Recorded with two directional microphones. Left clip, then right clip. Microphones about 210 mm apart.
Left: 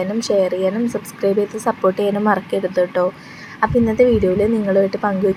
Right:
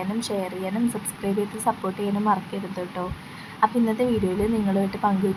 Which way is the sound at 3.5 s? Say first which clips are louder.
Left 7 dB; 10° left (ahead or behind).